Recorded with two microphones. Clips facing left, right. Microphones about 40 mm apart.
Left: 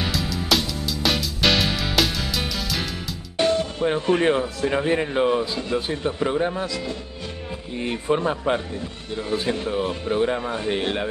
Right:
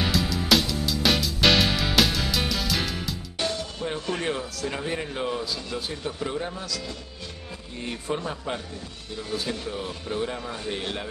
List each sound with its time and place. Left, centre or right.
0.0 s music: centre
3.3 s speech: left